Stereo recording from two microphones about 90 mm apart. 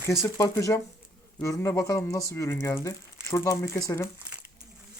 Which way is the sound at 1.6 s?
30° left (ahead or behind).